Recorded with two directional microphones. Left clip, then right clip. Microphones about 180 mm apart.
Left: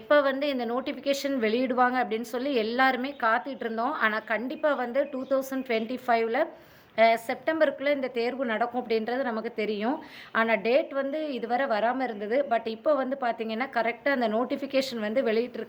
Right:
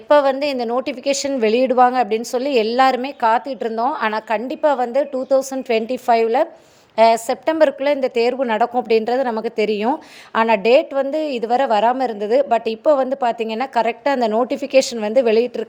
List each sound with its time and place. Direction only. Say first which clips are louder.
0.1 s a woman's voice: right 9 dB; 35° right (ahead or behind)